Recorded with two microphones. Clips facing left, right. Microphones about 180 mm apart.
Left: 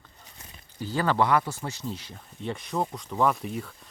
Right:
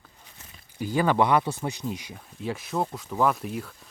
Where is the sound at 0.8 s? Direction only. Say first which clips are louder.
Right 2 dB; 15° right (ahead or behind).